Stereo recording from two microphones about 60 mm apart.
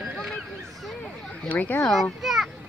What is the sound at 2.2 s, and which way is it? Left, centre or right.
Children playing, centre.